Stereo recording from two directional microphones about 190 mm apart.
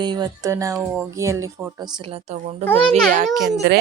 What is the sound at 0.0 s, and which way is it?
Speech, 20° right (ahead or behind).